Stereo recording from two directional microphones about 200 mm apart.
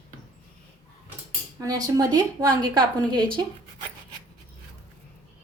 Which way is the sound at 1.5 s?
20° right (ahead or behind).